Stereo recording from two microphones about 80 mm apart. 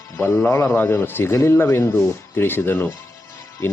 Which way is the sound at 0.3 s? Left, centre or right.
Left.